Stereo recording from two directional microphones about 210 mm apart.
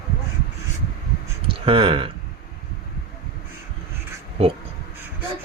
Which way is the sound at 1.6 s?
25° right (ahead or behind).